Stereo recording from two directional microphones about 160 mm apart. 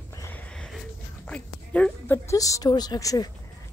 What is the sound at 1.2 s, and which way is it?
A woman's voice, 5° left (ahead or behind).